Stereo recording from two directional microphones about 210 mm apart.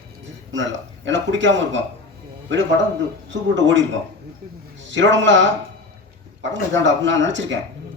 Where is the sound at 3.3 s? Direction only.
60° right (ahead or behind).